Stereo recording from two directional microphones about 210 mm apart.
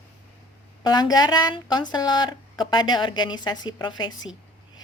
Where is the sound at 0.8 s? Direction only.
20° left (ahead or behind).